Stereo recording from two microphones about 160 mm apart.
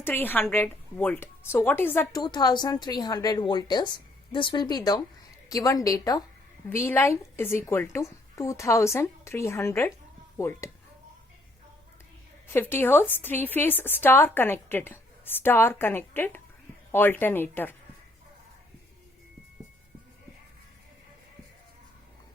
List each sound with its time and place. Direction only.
0.0 s a woman's voice: 10° left (ahead or behind)
2.2 s a woman's voice: 25° left (ahead or behind)
12.5 s a woman's voice: 15° left (ahead or behind)